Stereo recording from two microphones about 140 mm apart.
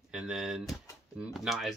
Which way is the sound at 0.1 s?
5° right (ahead or behind).